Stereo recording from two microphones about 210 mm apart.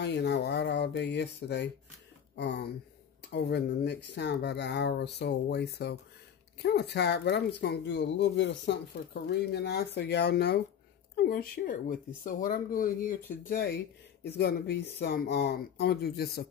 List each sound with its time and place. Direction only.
0.0 s speech: 55° left (ahead or behind)